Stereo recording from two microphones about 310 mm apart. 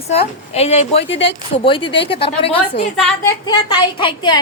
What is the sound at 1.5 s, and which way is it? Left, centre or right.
Speech, centre.